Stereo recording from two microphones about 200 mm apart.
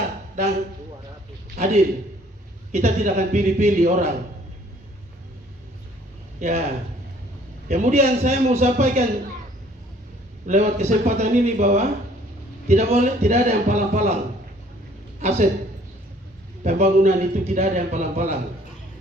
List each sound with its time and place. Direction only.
1.5 s a man's voice: 40° right (ahead or behind)
6.4 s a man's voice: 35° right (ahead or behind)
10.4 s a man's voice: 35° right (ahead or behind)
15.2 s a man's voice: 35° right (ahead or behind)
16.6 s a man's voice: 35° right (ahead or behind)